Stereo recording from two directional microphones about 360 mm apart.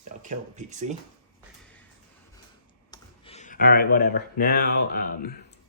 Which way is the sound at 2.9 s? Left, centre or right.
Centre.